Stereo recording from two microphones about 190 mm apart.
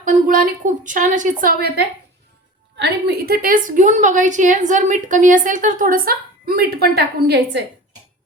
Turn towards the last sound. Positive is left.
turn(degrees=-60)  # may be behind; listen again after turning